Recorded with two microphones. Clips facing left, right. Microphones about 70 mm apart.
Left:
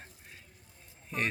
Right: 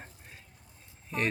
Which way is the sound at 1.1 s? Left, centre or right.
Centre.